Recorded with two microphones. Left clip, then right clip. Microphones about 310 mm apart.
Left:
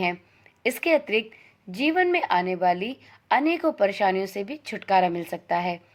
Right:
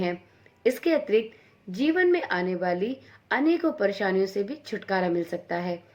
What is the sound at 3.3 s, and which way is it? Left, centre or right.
A woman's voice, left.